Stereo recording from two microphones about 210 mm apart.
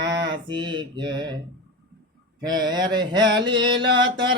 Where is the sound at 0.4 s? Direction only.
20° right (ahead or behind).